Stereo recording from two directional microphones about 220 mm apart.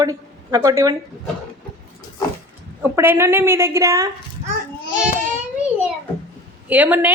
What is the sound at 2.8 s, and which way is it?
A woman's voice, 10° right (ahead or behind).